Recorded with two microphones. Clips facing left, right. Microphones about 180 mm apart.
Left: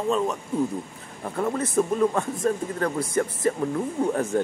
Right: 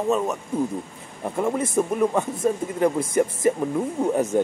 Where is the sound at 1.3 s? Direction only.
15° right (ahead or behind).